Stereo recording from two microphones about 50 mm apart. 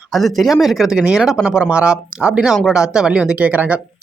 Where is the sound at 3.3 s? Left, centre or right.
Right.